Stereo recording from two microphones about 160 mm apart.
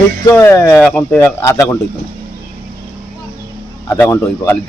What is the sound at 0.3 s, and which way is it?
A man's voice, 20° left (ahead or behind).